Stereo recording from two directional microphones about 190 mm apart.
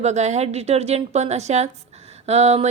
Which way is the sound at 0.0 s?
35° right (ahead or behind).